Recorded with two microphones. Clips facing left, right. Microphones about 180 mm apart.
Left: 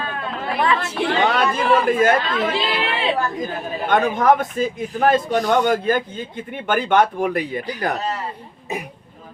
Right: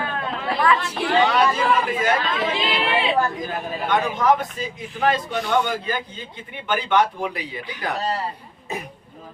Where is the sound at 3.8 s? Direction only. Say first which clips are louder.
Left 3 dB; 50° left (ahead or behind).